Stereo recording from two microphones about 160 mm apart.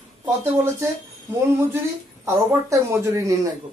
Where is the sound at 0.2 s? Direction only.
15° right (ahead or behind).